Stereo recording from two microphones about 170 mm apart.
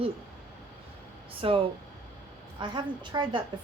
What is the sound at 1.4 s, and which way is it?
A woman's voice, 30° right (ahead or behind).